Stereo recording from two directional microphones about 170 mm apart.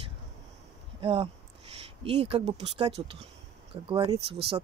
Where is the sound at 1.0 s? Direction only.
35° right (ahead or behind).